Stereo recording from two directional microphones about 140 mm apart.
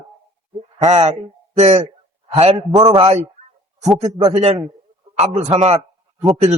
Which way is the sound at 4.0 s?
50° right (ahead or behind).